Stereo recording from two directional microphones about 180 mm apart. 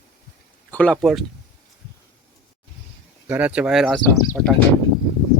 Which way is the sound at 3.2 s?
10° right (ahead or behind).